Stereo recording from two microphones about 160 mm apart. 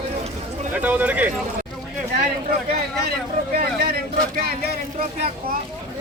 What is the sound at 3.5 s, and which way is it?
Speech, 75° right (ahead or behind).